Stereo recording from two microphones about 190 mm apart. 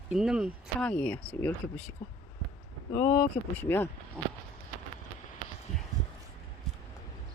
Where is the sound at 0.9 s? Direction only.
5° left (ahead or behind).